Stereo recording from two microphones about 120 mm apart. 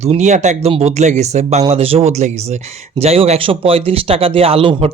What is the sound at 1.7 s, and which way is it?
Speech, 55° right (ahead or behind).